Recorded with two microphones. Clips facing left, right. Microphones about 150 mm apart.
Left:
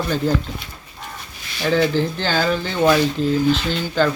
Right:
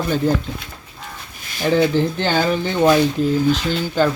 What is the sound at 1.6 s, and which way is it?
Speech, 15° right (ahead or behind).